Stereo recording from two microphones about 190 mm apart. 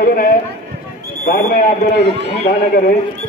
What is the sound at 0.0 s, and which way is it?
A man's voice, 50° left (ahead or behind).